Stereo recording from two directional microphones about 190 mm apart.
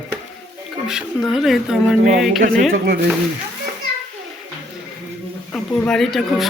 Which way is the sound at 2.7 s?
55° right (ahead or behind).